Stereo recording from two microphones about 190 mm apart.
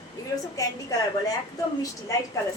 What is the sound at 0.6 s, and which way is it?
Speech, 20° left (ahead or behind).